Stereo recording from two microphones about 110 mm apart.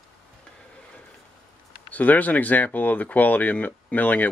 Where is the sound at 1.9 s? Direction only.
15° left (ahead or behind).